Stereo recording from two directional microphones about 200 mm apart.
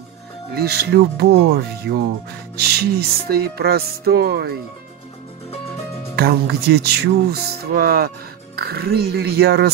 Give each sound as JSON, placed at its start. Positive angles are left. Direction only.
{"t": 0.6, "sound": "speech", "side_deg": -50}
{"t": 6.1, "sound": "speech", "side_deg": -50}